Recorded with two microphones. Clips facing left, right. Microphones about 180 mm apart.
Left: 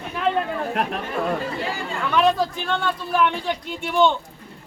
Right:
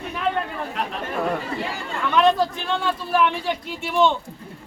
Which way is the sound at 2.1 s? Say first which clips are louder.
Right 1 dB; centre (ahead or behind).